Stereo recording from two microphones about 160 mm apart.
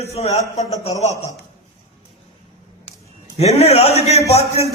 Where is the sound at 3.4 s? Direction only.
40° left (ahead or behind).